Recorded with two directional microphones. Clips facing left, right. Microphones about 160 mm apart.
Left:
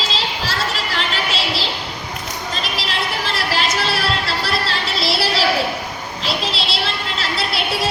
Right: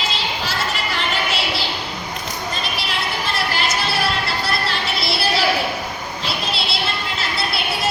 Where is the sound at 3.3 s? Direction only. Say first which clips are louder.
Left 2 dB; 90° left.